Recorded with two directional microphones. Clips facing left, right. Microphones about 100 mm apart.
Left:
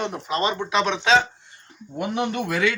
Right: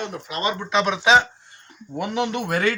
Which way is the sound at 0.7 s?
Centre (ahead or behind).